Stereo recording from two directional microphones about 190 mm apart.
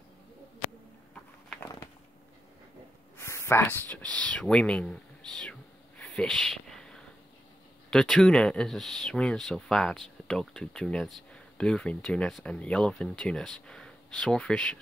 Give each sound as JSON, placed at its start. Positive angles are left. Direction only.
{"t": 3.2, "sound": "speech", "side_deg": 15}